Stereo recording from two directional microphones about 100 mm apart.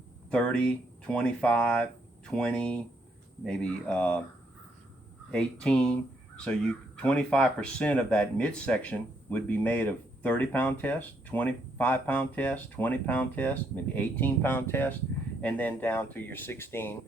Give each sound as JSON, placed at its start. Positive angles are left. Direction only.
{"t": 0.3, "sound": "speech", "side_deg": 10}
{"t": 5.3, "sound": "speech", "side_deg": 10}